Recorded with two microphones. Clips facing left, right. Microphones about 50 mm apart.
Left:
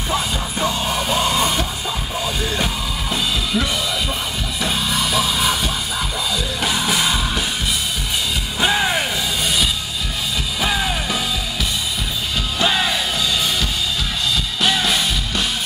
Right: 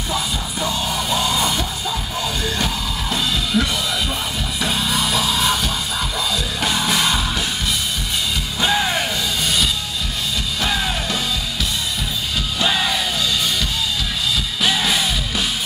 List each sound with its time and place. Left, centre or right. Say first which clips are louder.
0.1 s music: left 2 dB; left
2.4 s music: even; centre
8.5 s music: left 1 dB; centre
10.6 s music: left 1 dB; centre
12.5 s music: left 1 dB; centre
14.3 s music: left 1 dB; centre